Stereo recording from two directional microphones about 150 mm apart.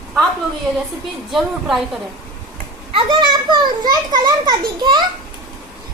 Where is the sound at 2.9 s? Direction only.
30° right (ahead or behind).